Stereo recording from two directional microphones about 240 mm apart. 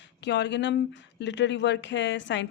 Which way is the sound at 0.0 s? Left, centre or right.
Left.